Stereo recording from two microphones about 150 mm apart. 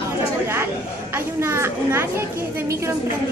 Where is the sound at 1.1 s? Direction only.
15° right (ahead or behind).